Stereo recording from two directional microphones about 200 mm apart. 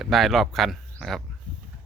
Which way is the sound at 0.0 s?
Centre (ahead or behind).